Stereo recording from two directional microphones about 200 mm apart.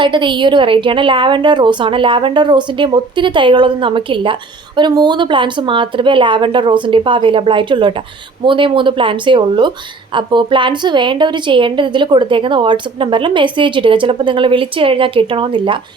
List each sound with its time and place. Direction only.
0.0 s a woman's voice: 25° right (ahead or behind)